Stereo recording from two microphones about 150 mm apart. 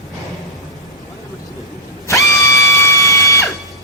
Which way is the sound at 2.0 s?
20° left (ahead or behind).